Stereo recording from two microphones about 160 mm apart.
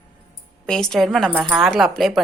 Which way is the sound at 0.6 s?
5° left (ahead or behind).